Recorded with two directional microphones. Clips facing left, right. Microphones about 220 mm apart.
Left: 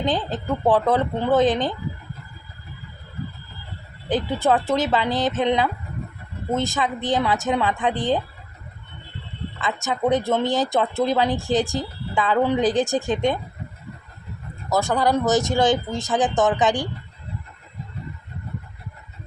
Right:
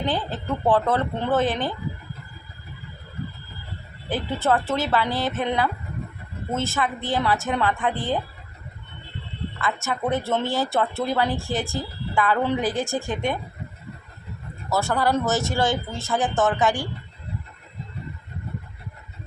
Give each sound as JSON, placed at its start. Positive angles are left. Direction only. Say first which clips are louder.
{"t": 0.0, "sound": "speech", "louder": "left 3 dB", "side_deg": 15}
{"t": 4.1, "sound": "speech", "louder": "left 3 dB", "side_deg": 15}
{"t": 9.8, "sound": "speech", "louder": "left 6 dB", "side_deg": 15}
{"t": 14.7, "sound": "speech", "louder": "left 2 dB", "side_deg": 15}